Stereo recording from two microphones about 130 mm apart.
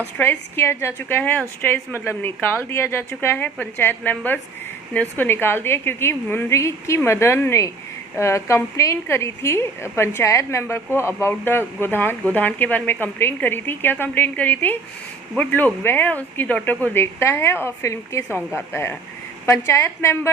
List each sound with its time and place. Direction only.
0.2 s a woman's voice: 15° left (ahead or behind)